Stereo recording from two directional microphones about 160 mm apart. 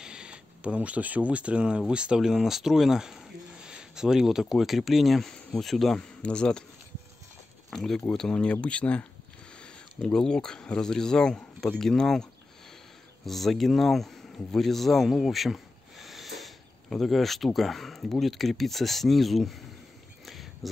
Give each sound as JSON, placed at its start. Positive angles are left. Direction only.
{"t": 0.0, "sound": "speech", "side_deg": -5}
{"t": 7.7, "sound": "speech", "side_deg": 5}
{"t": 20.2, "sound": "a sound", "side_deg": 0}